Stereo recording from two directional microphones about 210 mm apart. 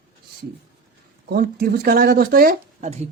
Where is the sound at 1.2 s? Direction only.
45° right (ahead or behind).